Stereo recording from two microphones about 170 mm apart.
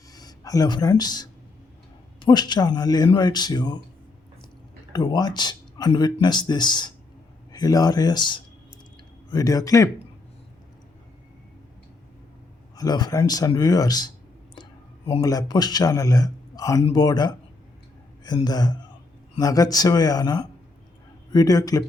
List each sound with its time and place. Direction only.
0.1 s a man's voice: 20° left (ahead or behind)
4.9 s a man's voice: 25° left (ahead or behind)
12.7 s a man's voice: 25° left (ahead or behind)
14.5 s clicking: 30° left (ahead or behind)
15.2 s a man's voice: 20° left (ahead or behind)
18.4 s a man's voice: 25° left (ahead or behind)